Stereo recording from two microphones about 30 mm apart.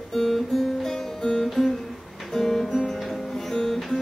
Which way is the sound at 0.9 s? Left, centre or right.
Centre.